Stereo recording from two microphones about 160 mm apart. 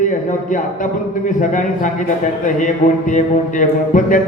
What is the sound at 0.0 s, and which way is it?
A man's voice, 55° left (ahead or behind).